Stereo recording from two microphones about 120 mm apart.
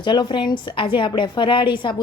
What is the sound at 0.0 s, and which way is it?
A woman's voice, 40° left (ahead or behind).